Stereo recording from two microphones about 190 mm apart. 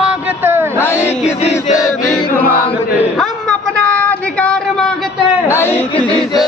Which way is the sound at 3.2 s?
5° left (ahead or behind).